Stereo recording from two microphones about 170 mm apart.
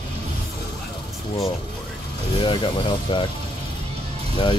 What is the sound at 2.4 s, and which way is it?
Speech, 30° left (ahead or behind).